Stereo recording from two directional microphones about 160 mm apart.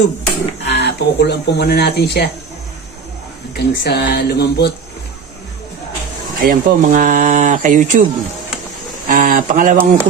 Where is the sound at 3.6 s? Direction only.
90° left.